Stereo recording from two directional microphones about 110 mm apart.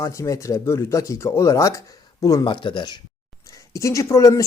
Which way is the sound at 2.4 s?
45° left (ahead or behind).